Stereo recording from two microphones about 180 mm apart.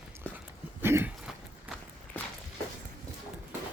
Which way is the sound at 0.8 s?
15° right (ahead or behind).